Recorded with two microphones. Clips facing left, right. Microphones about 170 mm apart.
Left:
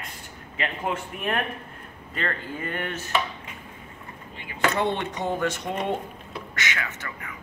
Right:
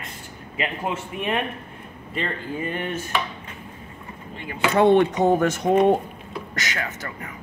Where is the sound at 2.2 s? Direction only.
10° right (ahead or behind).